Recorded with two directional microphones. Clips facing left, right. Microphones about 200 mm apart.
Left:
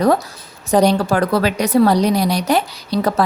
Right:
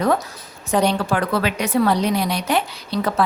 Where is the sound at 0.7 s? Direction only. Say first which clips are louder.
Left 5 dB; 40° left (ahead or behind).